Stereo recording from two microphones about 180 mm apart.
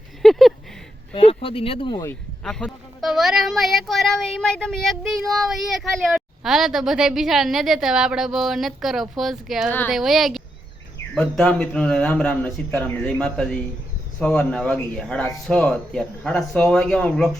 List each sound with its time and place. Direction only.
0.2 s a sound: centre (ahead or behind)
1.1 s speech: 30° left (ahead or behind)
2.0 s a woman's voice: 5° left (ahead or behind)